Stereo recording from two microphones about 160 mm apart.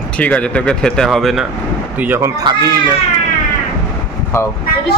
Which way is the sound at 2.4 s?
25° right (ahead or behind).